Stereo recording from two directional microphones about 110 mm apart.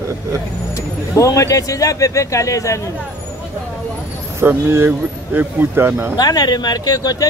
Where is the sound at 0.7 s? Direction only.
30° left (ahead or behind).